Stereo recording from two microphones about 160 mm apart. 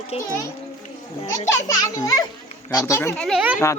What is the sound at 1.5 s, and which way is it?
A child's voice, 20° left (ahead or behind).